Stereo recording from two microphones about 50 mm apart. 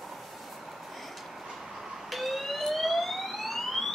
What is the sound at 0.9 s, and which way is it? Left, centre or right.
Vehicle, centre.